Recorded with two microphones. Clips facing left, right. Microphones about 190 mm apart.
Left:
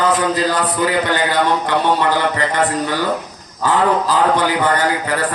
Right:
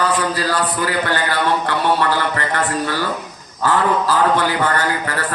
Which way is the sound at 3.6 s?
15° left (ahead or behind).